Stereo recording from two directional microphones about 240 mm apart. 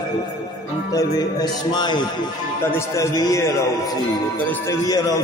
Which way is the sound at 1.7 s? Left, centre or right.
Centre.